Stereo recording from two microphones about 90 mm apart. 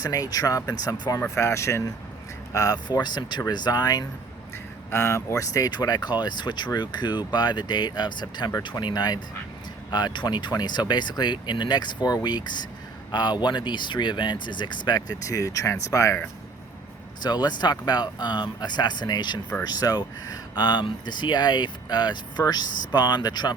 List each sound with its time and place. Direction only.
0.0 s speech: 45° left (ahead or behind)
1.2 s speech: 30° left (ahead or behind)
4.5 s speech: 30° left (ahead or behind)
17.2 s speech: 50° left (ahead or behind)